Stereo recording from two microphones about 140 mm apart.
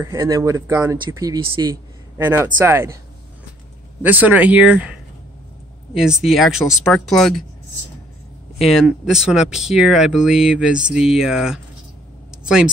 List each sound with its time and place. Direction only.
0.0 s speech: 20° right (ahead or behind)
2.1 s speech: 15° right (ahead or behind)
4.0 s speech: 10° right (ahead or behind)
6.2 s speech: centre (ahead or behind)
8.6 s speech: 5° right (ahead or behind)